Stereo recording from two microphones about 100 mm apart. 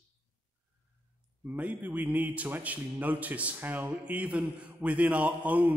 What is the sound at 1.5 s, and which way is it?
A man's voice, 15° right (ahead or behind).